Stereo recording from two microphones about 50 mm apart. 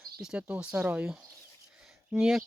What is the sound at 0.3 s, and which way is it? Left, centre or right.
Speech, right.